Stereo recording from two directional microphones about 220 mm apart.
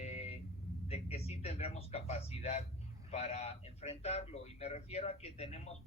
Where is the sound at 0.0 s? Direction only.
30° left (ahead or behind).